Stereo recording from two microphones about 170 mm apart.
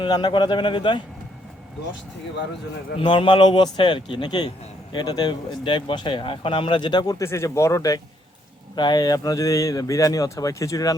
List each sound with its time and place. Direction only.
0.0 s a man's voice: 25° left (ahead or behind)
3.0 s a man's voice: 30° left (ahead or behind)